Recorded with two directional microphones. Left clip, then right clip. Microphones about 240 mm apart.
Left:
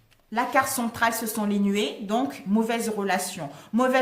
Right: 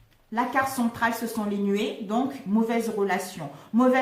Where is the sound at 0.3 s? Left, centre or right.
Left.